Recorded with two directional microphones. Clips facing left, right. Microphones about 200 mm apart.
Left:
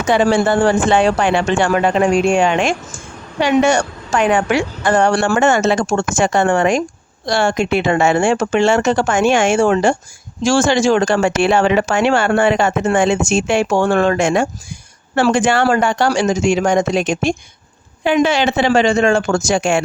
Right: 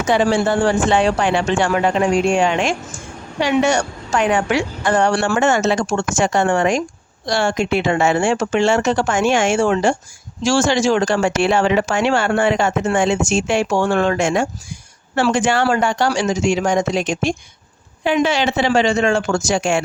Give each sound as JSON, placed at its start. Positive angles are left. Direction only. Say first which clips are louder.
{"t": 0.1, "sound": "speech", "louder": "left 3 dB", "side_deg": 55}